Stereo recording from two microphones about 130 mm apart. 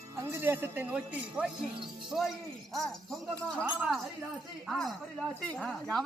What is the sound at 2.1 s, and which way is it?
Speech, centre (ahead or behind).